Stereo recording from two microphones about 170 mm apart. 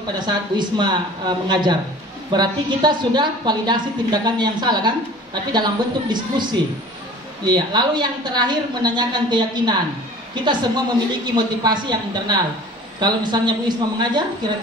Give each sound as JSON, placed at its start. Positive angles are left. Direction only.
{"t": 0.2, "sound": "a woman's voice", "side_deg": -25}